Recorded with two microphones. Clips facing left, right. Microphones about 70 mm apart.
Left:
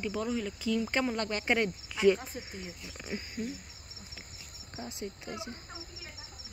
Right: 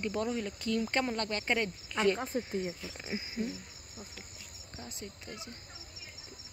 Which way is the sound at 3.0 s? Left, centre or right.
Centre.